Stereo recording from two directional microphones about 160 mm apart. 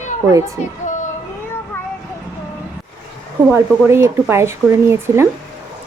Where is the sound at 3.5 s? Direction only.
15° right (ahead or behind).